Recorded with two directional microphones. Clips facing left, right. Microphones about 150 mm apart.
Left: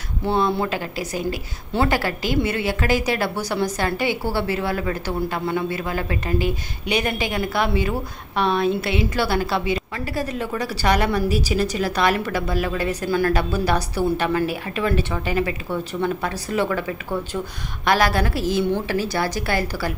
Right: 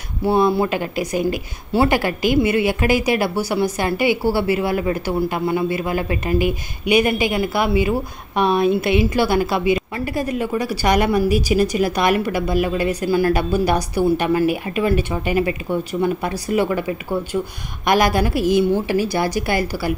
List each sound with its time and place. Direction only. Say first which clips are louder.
0.2 s a woman's voice: right 4 dB; 10° right (ahead or behind)
17.8 s a woman's voice: right 3 dB; 15° right (ahead or behind)